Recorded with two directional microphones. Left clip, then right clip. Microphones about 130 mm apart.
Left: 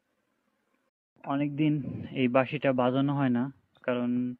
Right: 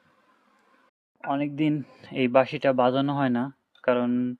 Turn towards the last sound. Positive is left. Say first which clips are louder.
# right 6 dB
turn(degrees=-25)  # may be behind; listen again after turning